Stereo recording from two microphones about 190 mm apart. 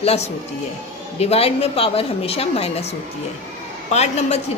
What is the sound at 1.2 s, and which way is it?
A woman's voice, 30° left (ahead or behind).